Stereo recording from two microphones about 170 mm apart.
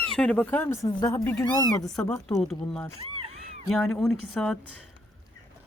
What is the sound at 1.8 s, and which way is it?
A woman's voice, centre (ahead or behind).